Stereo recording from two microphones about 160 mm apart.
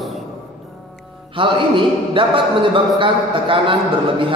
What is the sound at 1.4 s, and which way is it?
A man's voice, 30° right (ahead or behind).